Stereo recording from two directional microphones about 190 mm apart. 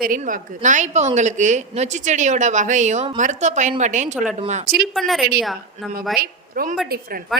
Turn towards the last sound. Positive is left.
turn(degrees=0)  # may be behind; listen again after turning